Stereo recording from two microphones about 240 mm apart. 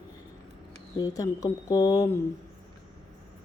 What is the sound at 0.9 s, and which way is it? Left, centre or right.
Speech, centre.